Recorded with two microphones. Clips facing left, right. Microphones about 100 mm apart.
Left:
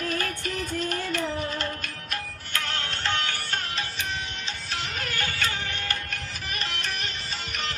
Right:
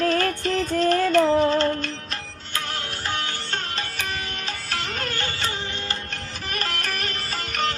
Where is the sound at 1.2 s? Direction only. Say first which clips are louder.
Right 11 dB; 90° right.